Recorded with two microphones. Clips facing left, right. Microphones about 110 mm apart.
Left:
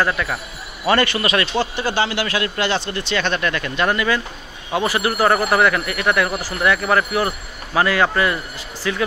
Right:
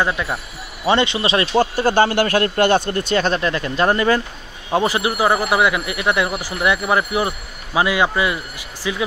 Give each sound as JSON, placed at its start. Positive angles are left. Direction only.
{"t": 0.0, "sound": "a man's voice", "side_deg": -20}
{"t": 1.6, "sound": "speech", "side_deg": -45}
{"t": 4.7, "sound": "speech", "side_deg": -25}